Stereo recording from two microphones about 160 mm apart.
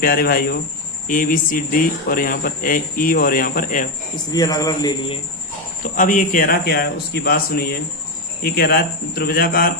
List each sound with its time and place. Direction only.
0.0 s speech: 65° left (ahead or behind)
1.0 s speech: 55° left (ahead or behind)
4.3 s a man's voice: 25° left (ahead or behind)
5.8 s speech: 55° left (ahead or behind)